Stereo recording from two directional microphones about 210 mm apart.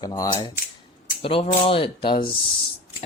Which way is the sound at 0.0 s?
20° left (ahead or behind).